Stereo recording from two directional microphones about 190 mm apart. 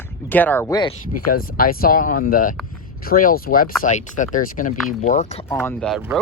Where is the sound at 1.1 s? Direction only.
50° left (ahead or behind).